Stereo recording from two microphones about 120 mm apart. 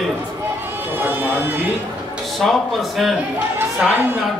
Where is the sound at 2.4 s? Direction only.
Centre (ahead or behind).